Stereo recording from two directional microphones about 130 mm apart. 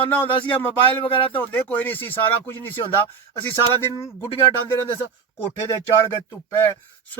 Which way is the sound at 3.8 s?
20° left (ahead or behind).